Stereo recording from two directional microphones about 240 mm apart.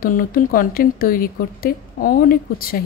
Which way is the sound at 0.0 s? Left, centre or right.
Left.